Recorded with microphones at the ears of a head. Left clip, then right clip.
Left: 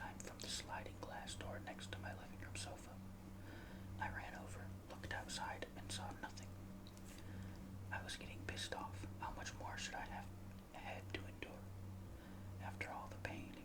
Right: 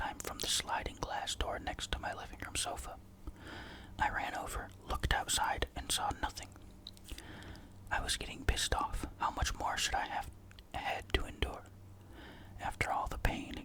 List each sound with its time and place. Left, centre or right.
0.0 s whispering: right
7.9 s speech: right
10.7 s whispering: right